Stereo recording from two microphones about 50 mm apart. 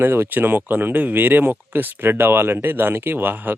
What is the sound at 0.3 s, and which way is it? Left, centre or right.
Speech, right.